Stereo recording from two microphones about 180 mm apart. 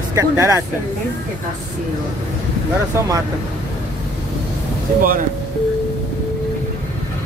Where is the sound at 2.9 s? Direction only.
15° right (ahead or behind).